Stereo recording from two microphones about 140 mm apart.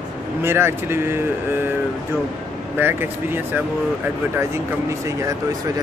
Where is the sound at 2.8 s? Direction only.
15° right (ahead or behind).